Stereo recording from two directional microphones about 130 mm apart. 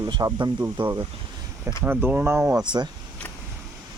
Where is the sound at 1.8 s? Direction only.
15° right (ahead or behind).